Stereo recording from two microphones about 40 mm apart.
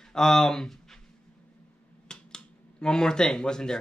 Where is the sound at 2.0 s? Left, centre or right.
Centre.